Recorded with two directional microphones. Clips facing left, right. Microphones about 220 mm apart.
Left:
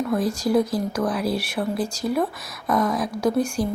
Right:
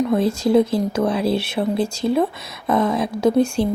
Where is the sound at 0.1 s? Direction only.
25° right (ahead or behind).